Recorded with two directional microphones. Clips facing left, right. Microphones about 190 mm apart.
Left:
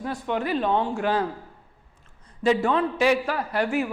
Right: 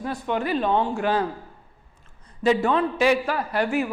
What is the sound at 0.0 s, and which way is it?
A woman's voice, 15° right (ahead or behind).